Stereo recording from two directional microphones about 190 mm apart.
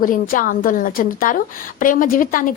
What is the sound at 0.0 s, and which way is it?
A woman's voice, 45° left (ahead or behind).